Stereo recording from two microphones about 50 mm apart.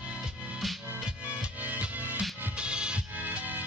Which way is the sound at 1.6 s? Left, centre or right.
Right.